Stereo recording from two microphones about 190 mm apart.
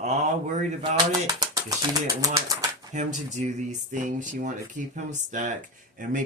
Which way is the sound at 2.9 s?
40° right (ahead or behind).